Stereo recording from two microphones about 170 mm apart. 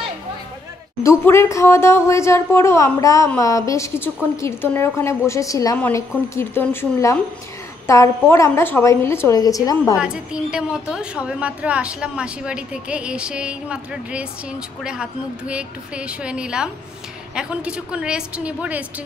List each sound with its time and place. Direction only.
1.2 s a woman's voice: 15° left (ahead or behind)
9.9 s a woman's voice: 5° right (ahead or behind)